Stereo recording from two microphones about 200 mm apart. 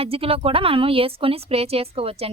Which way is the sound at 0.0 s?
30° right (ahead or behind).